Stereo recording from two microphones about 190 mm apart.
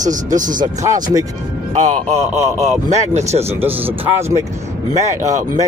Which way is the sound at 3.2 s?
15° right (ahead or behind).